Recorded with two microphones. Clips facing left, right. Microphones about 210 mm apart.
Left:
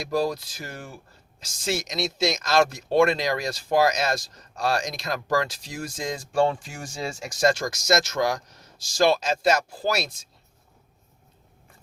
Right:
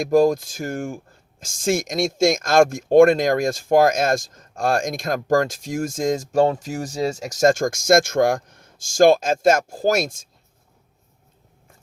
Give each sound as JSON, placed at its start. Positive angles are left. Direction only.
{"t": 0.0, "sound": "speech", "side_deg": -50}